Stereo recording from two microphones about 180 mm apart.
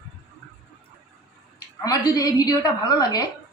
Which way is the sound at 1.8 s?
20° left (ahead or behind).